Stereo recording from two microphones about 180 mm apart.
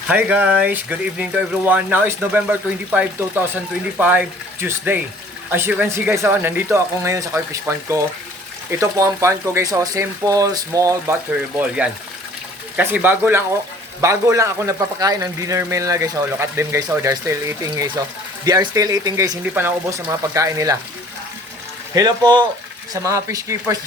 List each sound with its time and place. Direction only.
0.1 s speech: 10° right (ahead or behind)
12.7 s speech: 10° right (ahead or behind)
21.9 s speech: 25° right (ahead or behind)